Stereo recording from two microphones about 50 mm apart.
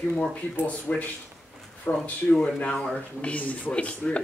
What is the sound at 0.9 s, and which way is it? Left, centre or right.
A man's voice, left.